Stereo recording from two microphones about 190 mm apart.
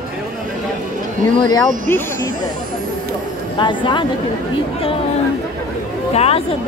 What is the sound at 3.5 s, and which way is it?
Speech, 25° left (ahead or behind).